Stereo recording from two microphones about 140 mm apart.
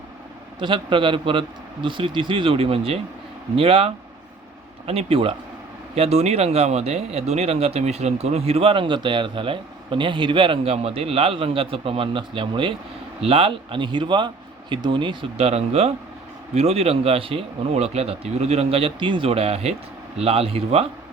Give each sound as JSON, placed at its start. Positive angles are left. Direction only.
{"t": 0.6, "sound": "speech", "side_deg": -35}